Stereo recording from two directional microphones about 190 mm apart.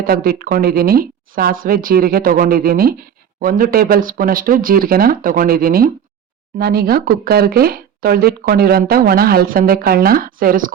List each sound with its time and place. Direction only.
0.0 s speech: 50° right (ahead or behind)